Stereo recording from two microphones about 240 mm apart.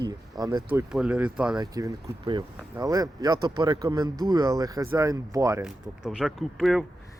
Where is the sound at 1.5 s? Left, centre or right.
Centre.